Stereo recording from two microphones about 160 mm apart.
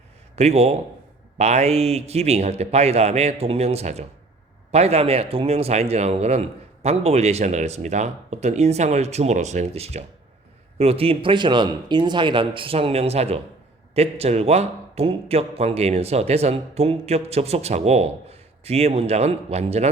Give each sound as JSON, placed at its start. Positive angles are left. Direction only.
{"t": 0.3, "sound": "speech", "side_deg": -40}